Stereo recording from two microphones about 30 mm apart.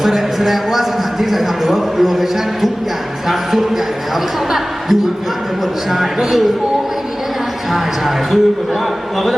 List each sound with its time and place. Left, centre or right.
0.0 s a man's voice: centre
4.1 s a man's voice: centre
7.7 s a man's voice: centre